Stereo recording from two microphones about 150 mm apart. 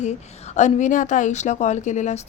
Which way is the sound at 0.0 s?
50° left (ahead or behind).